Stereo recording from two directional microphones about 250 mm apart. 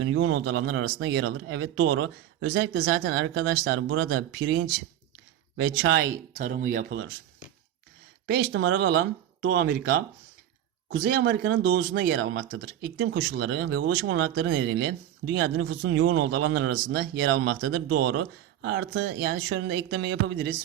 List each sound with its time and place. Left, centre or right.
0.0 s speech: right
6.3 s speech: right
8.5 s speech: right